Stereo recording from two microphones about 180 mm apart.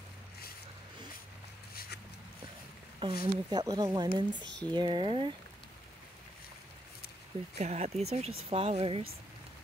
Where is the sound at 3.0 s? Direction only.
30° right (ahead or behind).